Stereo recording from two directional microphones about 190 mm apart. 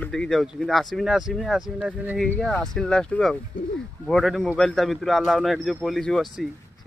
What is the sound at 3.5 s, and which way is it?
Speech, 50° left (ahead or behind).